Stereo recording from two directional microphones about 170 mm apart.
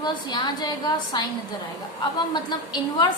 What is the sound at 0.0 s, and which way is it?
Speech, 25° left (ahead or behind).